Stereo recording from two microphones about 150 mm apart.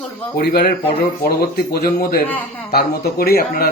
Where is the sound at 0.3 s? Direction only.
90° left.